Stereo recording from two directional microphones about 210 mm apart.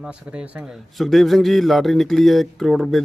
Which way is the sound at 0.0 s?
5° right (ahead or behind).